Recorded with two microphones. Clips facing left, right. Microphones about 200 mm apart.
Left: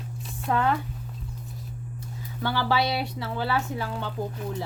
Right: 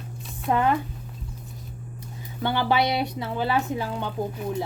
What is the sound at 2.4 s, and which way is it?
Speech, 20° right (ahead or behind).